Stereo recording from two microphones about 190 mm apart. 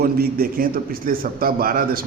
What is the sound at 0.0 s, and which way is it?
A man's voice, 50° right (ahead or behind).